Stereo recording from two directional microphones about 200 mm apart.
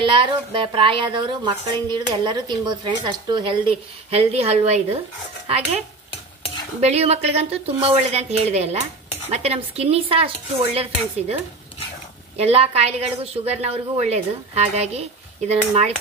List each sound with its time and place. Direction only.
0.0 s a woman's voice: 25° right (ahead or behind)
6.8 s a woman's voice: 30° right (ahead or behind)
12.4 s a woman's voice: 30° right (ahead or behind)